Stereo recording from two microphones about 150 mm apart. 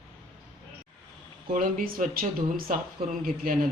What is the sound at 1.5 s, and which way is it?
Speech, 65° right (ahead or behind).